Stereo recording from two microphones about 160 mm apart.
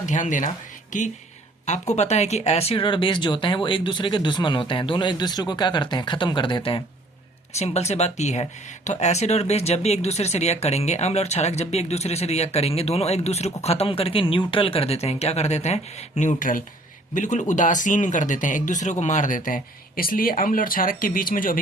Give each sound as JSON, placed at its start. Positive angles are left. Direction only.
{"t": 0.0, "sound": "speech", "side_deg": 50}
{"t": 7.5, "sound": "speech", "side_deg": 45}